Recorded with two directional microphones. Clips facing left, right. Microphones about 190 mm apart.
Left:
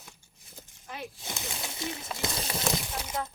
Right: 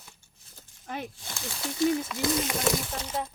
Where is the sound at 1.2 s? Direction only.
20° left (ahead or behind).